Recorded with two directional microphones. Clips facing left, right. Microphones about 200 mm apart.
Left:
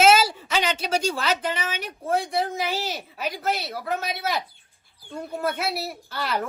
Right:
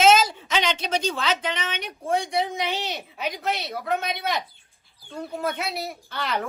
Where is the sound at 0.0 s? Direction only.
10° left (ahead or behind).